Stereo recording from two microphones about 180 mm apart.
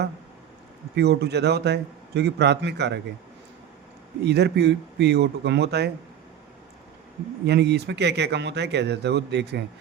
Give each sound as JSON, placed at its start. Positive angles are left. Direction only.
{"t": 0.9, "sound": "speech", "side_deg": -65}
{"t": 4.2, "sound": "speech", "side_deg": -70}
{"t": 7.4, "sound": "speech", "side_deg": -70}